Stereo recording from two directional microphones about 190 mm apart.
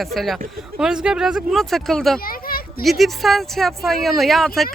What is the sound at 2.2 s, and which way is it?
Children playing, 50° left (ahead or behind).